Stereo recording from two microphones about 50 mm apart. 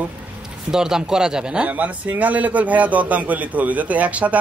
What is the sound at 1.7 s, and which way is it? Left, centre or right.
A man's voice, right.